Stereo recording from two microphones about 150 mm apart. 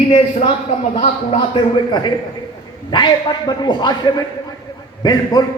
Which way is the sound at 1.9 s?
30° left (ahead or behind).